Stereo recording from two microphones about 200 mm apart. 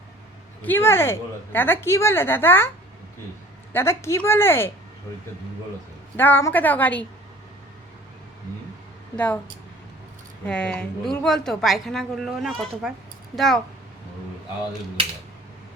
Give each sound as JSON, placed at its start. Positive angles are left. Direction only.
{"t": 0.6, "sound": "a woman's voice", "side_deg": 10}
{"t": 3.7, "sound": "a woman's voice", "side_deg": 10}
{"t": 6.1, "sound": "a woman's voice", "side_deg": 10}
{"t": 9.1, "sound": "a woman's voice", "side_deg": 10}
{"t": 10.4, "sound": "a woman's voice", "side_deg": 5}